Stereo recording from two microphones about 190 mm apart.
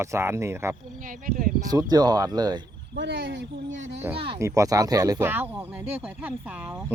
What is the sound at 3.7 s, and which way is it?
Speech, 80° right.